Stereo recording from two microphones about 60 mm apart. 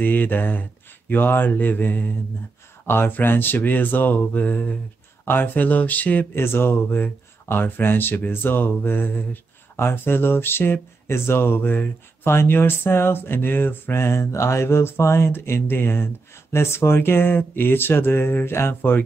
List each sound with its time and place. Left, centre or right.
0.0 s speech: left
6.3 s speech: left
18.8 s speech: left